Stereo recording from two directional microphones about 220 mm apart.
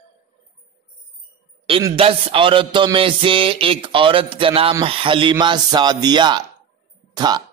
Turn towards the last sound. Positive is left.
turn(degrees=-20)  # may be behind; listen again after turning